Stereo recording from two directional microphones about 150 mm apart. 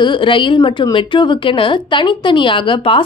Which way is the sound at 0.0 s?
35° left (ahead or behind).